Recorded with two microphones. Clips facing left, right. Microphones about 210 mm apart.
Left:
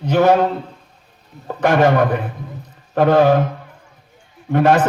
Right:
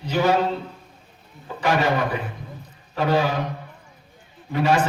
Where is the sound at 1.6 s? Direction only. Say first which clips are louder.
Left 7 dB; 55° left (ahead or behind).